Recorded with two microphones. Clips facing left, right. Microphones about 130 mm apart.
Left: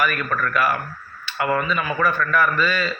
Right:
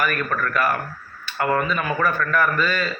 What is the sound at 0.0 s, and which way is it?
A man's voice, 45° right (ahead or behind).